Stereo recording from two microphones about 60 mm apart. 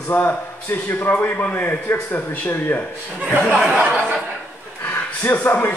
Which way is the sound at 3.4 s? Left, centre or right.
Centre.